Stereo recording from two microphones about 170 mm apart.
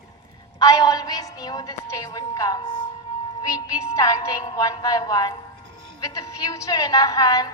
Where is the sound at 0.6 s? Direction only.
20° left (ahead or behind).